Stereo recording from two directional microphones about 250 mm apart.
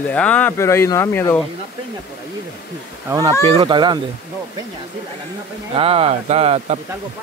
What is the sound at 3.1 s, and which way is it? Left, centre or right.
Speech, centre.